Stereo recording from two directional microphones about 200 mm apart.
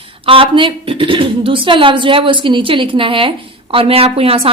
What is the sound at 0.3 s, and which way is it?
Speech, 25° right (ahead or behind).